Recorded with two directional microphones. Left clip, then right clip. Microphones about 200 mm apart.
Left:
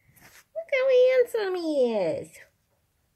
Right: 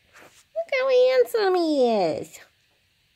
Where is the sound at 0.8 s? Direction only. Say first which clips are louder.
Right 1 dB; 40° right (ahead or behind).